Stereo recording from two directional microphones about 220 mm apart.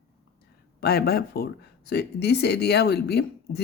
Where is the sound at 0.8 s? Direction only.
45° left (ahead or behind).